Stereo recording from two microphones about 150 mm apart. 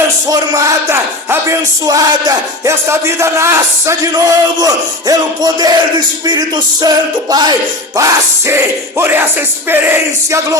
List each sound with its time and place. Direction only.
0.3 s a man's voice: 20° right (ahead or behind)
7.9 s music: 20° right (ahead or behind)